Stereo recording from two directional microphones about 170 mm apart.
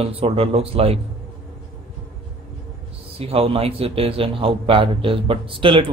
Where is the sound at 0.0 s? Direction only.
35° right (ahead or behind).